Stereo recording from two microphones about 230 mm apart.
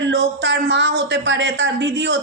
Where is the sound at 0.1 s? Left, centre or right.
Right.